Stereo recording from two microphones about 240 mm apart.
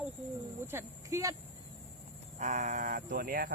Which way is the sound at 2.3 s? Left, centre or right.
Right.